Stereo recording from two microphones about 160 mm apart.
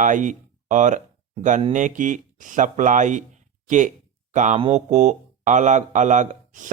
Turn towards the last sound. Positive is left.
turn(degrees=-50)  # may be behind; listen again after turning